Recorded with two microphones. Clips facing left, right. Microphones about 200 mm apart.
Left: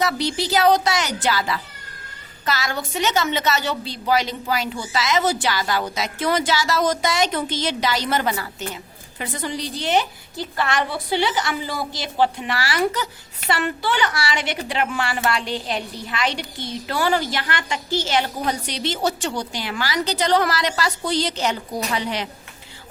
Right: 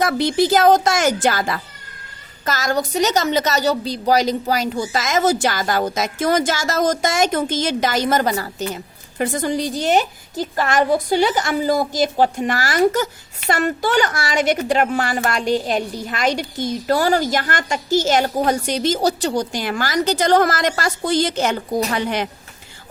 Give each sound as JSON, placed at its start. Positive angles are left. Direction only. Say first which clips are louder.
{"t": 0.0, "sound": "a woman's voice", "louder": "right 6 dB", "side_deg": -50}